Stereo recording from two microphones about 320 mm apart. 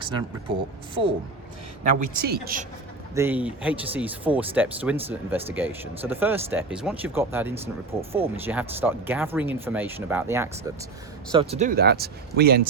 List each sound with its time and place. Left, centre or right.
1.0 s speech: centre
1.8 s speech: right
3.2 s speech: centre
11.3 s speech: centre